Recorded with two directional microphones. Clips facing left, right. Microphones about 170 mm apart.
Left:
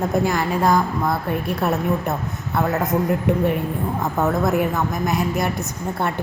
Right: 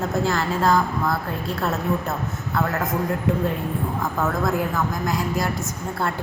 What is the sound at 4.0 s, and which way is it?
A woman's voice, 20° left (ahead or behind).